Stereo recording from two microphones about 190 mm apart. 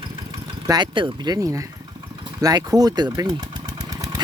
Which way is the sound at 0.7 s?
25° right (ahead or behind).